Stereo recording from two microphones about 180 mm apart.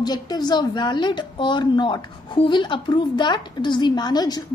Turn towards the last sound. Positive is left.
turn(degrees=20)  # may be behind; listen again after turning